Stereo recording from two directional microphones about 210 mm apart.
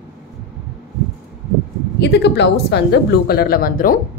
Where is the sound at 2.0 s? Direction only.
55° left (ahead or behind).